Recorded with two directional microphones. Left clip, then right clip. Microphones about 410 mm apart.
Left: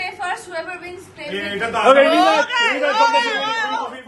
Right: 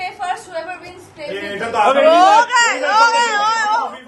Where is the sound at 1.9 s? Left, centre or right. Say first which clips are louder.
Right 4 dB; centre.